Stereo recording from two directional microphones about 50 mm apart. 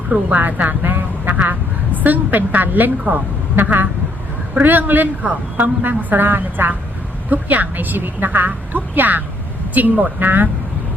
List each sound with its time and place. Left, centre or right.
0.3 s vehicle: right
3.1 s a woman's voice: right